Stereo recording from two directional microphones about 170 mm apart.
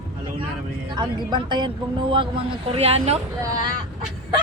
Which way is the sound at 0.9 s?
25° right (ahead or behind).